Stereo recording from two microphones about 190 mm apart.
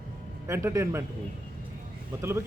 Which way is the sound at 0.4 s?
15° right (ahead or behind).